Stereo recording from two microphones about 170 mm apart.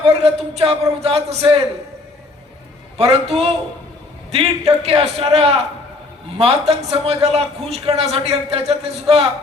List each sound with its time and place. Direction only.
0.0 s a man's voice: 35° right (ahead or behind)
3.0 s a man's voice: 35° right (ahead or behind)